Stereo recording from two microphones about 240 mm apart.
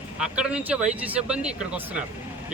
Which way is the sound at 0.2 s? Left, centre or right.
Centre.